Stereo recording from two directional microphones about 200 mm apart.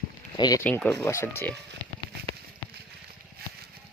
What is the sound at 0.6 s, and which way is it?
Speech, 10° left (ahead or behind).